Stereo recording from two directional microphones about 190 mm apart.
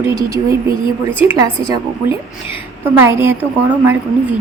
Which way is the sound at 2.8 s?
10° right (ahead or behind).